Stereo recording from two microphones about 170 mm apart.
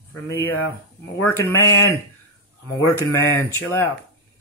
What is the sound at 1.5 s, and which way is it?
Speech, 15° left (ahead or behind).